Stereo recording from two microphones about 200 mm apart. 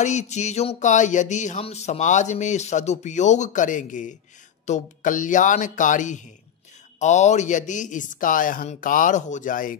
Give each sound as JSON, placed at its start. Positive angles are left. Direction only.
{"t": 0.0, "sound": "music", "side_deg": 35}